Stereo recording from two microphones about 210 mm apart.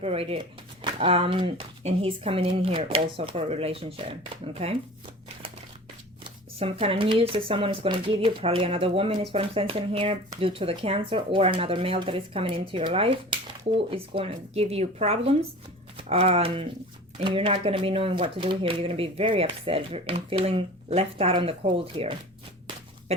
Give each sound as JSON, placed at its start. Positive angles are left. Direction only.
{"t": 0.0, "sound": "speech", "side_deg": -30}
{"t": 6.6, "sound": "speech", "side_deg": -25}